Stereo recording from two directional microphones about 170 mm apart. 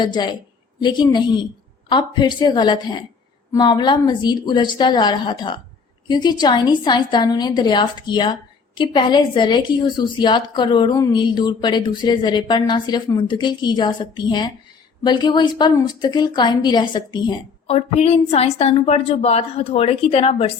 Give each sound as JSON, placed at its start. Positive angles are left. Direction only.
{"t": 0.0, "sound": "a woman's voice", "side_deg": 25}